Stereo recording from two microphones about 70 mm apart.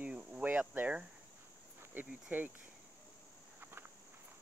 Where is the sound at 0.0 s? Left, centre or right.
Centre.